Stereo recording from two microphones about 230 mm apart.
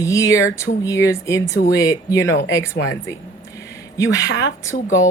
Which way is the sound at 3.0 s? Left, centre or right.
Centre.